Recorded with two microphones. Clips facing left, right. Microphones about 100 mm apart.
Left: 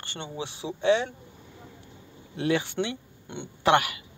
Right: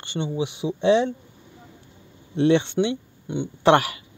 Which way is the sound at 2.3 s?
30° right (ahead or behind).